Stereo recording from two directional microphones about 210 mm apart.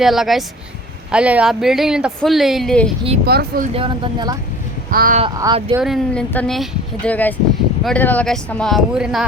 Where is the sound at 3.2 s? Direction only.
50° right (ahead or behind).